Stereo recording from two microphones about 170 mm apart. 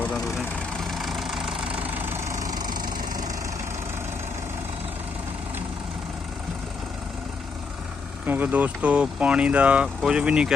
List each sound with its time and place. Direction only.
0.0 s vehicle: 5° left (ahead or behind)
2.2 s vehicle: 20° right (ahead or behind)
8.3 s speech: 10° right (ahead or behind)